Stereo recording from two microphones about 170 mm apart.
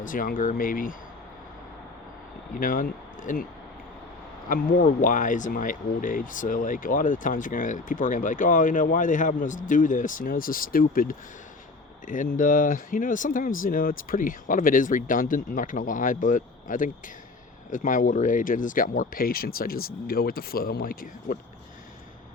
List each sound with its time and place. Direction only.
0.0 s speech: 55° left (ahead or behind)
2.6 s speech: 55° left (ahead or behind)
4.4 s speech: 55° left (ahead or behind)